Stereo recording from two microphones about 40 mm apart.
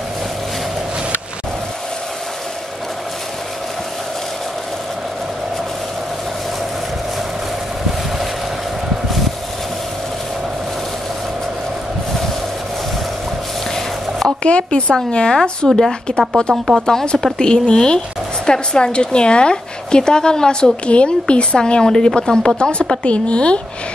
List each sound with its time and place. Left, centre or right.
14.4 s speech: left
15.6 s a woman's voice: centre
16.2 s speech: left
20.8 s speech: left
22.6 s speech: left